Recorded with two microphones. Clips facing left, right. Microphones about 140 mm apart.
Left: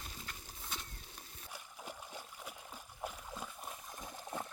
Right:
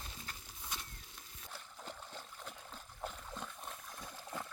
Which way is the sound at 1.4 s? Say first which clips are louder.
Even; 10° left (ahead or behind).